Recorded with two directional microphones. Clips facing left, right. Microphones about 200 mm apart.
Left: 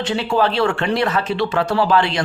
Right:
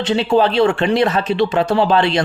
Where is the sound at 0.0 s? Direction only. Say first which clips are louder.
Right 4 dB; 20° right (ahead or behind).